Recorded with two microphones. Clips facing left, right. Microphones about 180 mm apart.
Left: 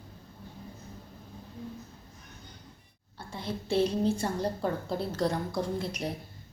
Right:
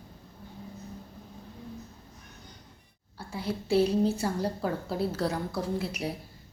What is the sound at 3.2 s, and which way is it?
Speech, 10° right (ahead or behind).